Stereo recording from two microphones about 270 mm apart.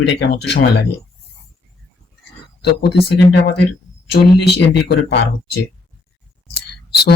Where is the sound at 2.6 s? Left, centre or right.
Left.